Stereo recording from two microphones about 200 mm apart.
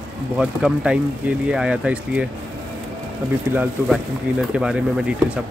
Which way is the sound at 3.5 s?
10° right (ahead or behind).